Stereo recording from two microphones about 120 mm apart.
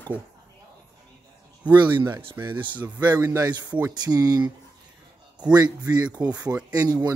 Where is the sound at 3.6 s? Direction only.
10° right (ahead or behind).